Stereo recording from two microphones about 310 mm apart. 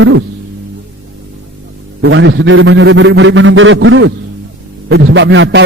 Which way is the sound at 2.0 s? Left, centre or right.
Right.